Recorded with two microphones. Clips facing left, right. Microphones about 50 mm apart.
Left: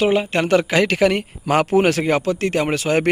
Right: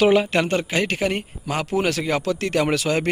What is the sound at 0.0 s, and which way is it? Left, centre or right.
Speech, centre.